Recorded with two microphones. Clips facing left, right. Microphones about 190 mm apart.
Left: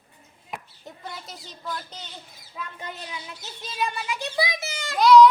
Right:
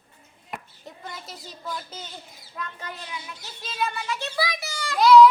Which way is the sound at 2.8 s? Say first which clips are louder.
Left 1 dB; 20° left (ahead or behind).